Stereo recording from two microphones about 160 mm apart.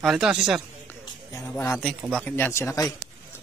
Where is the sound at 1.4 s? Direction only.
15° left (ahead or behind).